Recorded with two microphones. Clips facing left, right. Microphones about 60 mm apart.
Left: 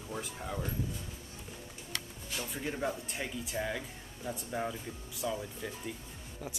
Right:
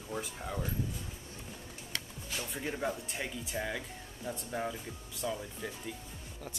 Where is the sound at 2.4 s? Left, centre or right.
Centre.